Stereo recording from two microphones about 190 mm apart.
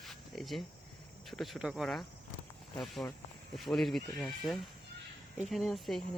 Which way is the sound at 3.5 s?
Centre (ahead or behind).